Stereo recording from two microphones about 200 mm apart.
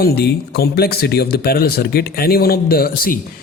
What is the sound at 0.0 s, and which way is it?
Speech, 50° left (ahead or behind).